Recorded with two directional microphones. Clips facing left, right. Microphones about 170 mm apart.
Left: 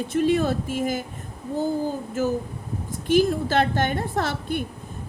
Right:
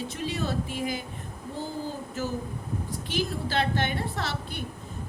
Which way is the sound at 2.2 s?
50° left (ahead or behind).